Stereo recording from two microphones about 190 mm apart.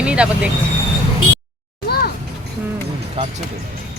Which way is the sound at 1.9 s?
55° left (ahead or behind).